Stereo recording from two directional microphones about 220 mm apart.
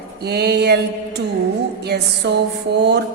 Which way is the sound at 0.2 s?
45° right (ahead or behind).